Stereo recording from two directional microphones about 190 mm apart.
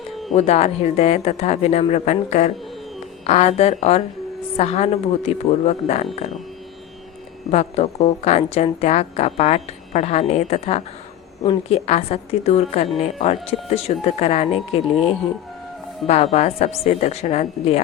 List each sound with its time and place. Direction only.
0.3 s speech: 35° left (ahead or behind)
7.5 s speech: 35° left (ahead or behind)
16.0 s speech: 35° left (ahead or behind)